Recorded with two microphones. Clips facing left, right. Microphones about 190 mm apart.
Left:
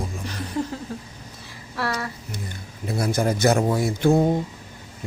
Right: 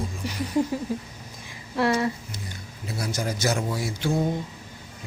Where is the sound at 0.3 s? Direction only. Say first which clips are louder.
Right 5 dB; 10° right (ahead or behind).